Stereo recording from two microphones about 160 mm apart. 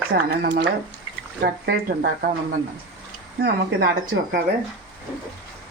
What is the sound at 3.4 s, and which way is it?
Speech, 90° right.